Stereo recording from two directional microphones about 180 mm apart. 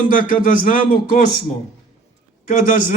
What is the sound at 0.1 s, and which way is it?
Speech, 50° left (ahead or behind).